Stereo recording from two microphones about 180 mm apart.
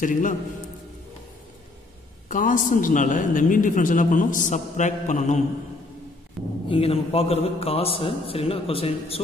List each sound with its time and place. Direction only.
0.0 s a man's voice: 45° left (ahead or behind)
2.2 s a man's voice: 45° left (ahead or behind)
6.4 s speech: centre (ahead or behind)
6.7 s a man's voice: 30° left (ahead or behind)